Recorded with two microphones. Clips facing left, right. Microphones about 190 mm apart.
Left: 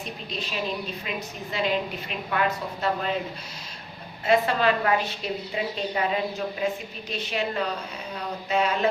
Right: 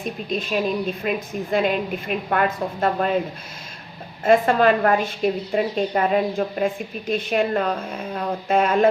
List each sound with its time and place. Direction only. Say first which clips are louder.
0.0 s a woman's voice: right 8 dB; 50° right (ahead or behind)
4.2 s a woman's voice: right 6 dB; 50° right (ahead or behind)